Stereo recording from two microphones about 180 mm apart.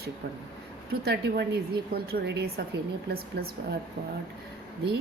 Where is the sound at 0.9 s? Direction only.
60° right (ahead or behind).